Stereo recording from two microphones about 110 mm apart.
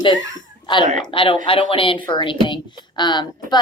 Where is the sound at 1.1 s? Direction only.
50° left (ahead or behind).